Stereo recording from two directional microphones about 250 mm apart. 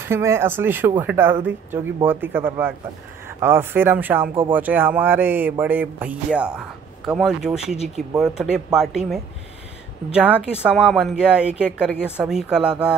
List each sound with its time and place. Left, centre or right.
0.1 s speech: centre
7.7 s speech: left
8.1 s speech: centre